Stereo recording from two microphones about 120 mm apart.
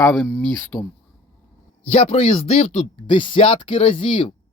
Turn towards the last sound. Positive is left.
turn(degrees=45)  # may be behind; listen again after turning